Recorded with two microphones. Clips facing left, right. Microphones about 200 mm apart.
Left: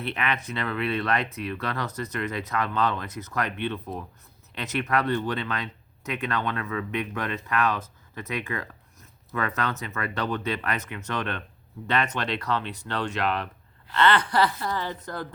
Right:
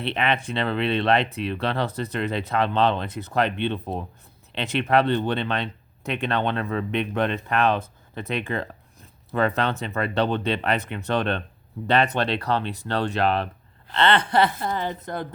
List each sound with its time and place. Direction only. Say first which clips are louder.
0.0 s speech: right 5 dB; 25° right (ahead or behind)